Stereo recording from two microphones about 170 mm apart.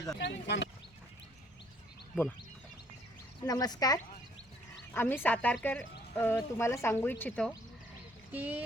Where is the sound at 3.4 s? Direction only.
20° left (ahead or behind).